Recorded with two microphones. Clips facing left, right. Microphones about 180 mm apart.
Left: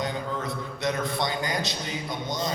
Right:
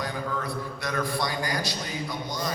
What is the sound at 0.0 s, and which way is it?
A man's voice, 20° left (ahead or behind).